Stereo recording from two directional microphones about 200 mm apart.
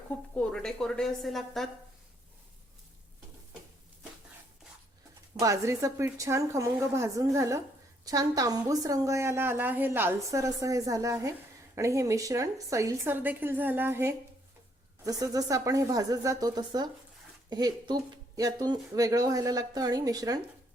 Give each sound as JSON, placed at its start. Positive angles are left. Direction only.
{"t": 0.3, "sound": "a woman's voice", "side_deg": 0}
{"t": 5.4, "sound": "a woman's voice", "side_deg": -15}